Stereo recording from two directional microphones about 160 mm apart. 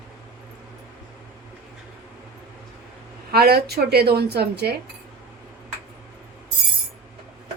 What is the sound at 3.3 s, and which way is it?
A woman's voice, 75° right (ahead or behind).